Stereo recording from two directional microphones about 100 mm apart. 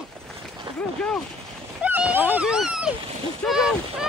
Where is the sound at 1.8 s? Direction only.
15° right (ahead or behind).